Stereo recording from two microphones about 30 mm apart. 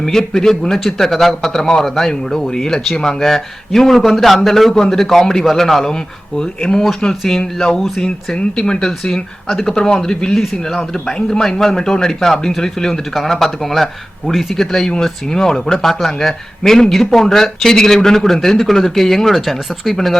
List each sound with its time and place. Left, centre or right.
0.0 s speech: centre
8.4 s speech: left
9.5 s speech: centre
9.7 s speech: left; by 20.1 s centre